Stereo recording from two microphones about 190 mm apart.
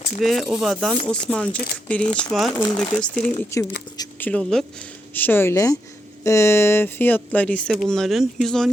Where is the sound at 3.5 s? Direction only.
15° left (ahead or behind).